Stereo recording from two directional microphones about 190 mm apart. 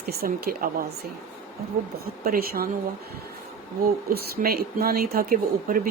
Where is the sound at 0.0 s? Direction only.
50° right (ahead or behind).